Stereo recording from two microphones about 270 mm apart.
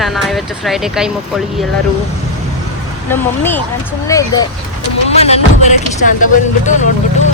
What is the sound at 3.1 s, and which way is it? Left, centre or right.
Speech, centre.